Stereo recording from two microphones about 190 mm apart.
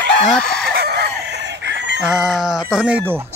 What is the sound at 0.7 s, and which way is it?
Fowl, 60° right (ahead or behind).